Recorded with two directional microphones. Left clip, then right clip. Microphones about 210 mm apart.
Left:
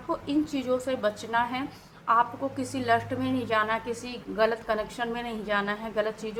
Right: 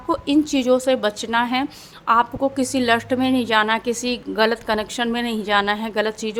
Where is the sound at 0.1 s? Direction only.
50° right (ahead or behind).